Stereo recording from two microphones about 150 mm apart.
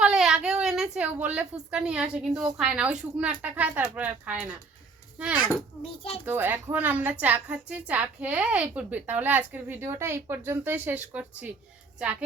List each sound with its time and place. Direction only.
0.0 s a woman's voice: 5° right (ahead or behind)
5.8 s a child's voice: 40° left (ahead or behind)
6.2 s a woman's voice: 15° right (ahead or behind)